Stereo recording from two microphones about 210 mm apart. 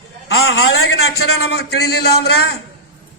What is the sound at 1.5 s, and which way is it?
Speech, 50° left (ahead or behind).